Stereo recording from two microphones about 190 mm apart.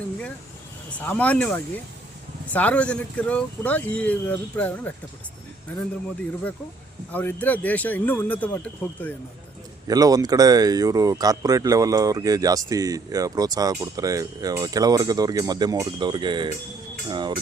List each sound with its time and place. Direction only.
0.9 s speech: 5° left (ahead or behind)
7.1 s speech: 10° left (ahead or behind)
9.8 s speech: 20° right (ahead or behind)